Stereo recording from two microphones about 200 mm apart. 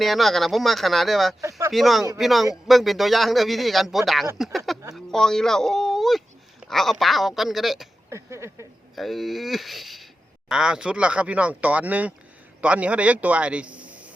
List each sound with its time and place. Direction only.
0.0 s a man's voice: centre (ahead or behind)
1.4 s speech: 15° right (ahead or behind)
1.7 s a man's voice: centre (ahead or behind)
8.1 s a sound: 15° right (ahead or behind)
9.0 s a man's voice: centre (ahead or behind)